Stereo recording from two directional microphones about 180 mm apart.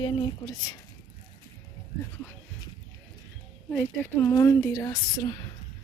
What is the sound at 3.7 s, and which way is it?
Speech, 10° left (ahead or behind).